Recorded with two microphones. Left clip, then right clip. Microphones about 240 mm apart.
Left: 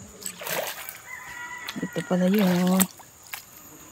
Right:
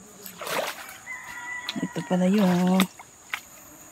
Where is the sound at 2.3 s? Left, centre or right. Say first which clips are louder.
Right 1 dB; left.